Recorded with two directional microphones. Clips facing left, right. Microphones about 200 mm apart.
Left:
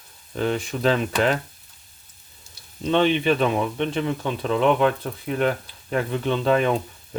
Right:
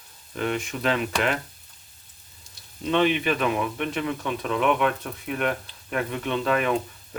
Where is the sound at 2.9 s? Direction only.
30° left (ahead or behind).